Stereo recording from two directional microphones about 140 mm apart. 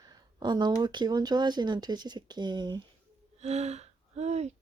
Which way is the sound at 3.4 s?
50° right (ahead or behind).